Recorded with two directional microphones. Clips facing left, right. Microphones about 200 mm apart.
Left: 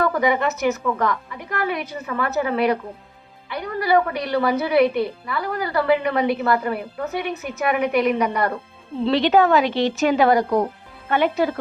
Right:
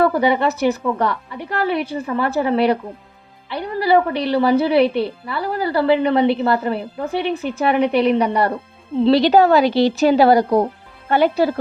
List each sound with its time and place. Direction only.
0.0 s a woman's voice: 30° right (ahead or behind)